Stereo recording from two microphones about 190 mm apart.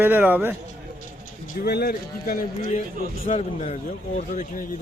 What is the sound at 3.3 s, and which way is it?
A man's voice, 35° left (ahead or behind).